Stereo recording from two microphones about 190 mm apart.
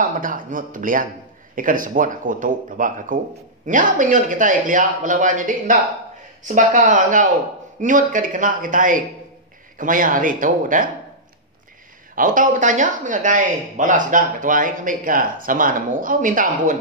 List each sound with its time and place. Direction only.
0.0 s speech: 45° right (ahead or behind)
12.2 s speech: 45° right (ahead or behind)